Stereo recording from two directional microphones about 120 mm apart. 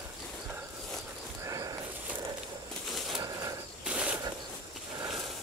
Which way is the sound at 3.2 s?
30° right (ahead or behind).